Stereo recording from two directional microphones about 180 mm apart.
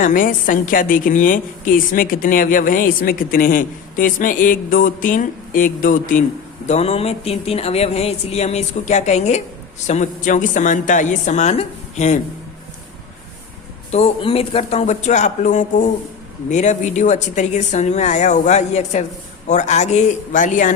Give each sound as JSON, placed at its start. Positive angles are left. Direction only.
{"t": 0.0, "sound": "a woman's voice", "side_deg": 50}
{"t": 6.7, "sound": "a woman's voice", "side_deg": 35}
{"t": 13.9, "sound": "speech", "side_deg": 30}